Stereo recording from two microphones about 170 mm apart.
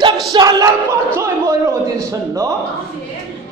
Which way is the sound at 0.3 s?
20° right (ahead or behind).